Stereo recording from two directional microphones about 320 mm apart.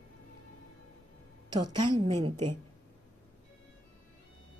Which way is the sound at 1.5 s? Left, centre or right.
Centre.